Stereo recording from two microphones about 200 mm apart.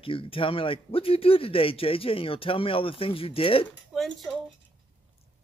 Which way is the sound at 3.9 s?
Centre (ahead or behind).